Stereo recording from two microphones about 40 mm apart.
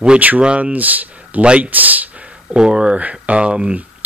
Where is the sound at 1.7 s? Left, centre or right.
Right.